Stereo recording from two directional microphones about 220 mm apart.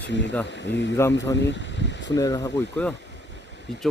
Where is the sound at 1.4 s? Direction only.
55° left (ahead or behind).